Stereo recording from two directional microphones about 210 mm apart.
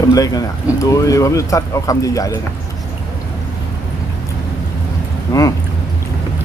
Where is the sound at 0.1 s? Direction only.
15° left (ahead or behind).